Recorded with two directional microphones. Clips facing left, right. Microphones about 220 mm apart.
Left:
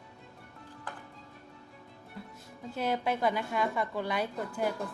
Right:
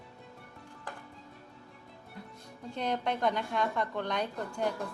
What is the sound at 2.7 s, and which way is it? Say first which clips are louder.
A woman's voice: left 2 dB; 5° left (ahead or behind).